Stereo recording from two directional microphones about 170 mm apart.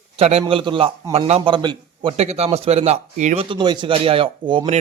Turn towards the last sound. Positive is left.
turn(degrees=-30)  # may be behind; listen again after turning